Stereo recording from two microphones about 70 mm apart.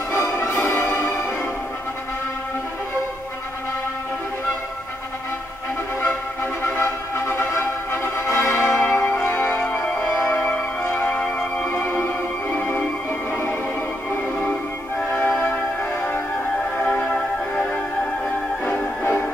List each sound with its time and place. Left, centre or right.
0.1 s music: left
6.6 s music: left
15.0 s music: centre
16.7 s music: centre